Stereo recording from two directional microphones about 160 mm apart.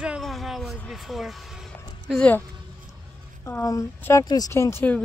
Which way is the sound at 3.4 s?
20° left (ahead or behind).